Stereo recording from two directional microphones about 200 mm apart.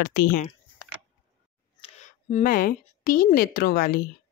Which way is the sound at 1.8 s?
35° left (ahead or behind).